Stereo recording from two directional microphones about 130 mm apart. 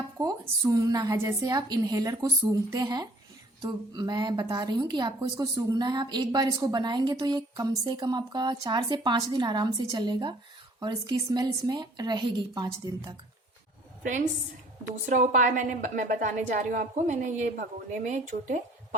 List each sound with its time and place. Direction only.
0.2 s a woman's voice: 25° right (ahead or behind)
14.0 s a woman's voice: 90° right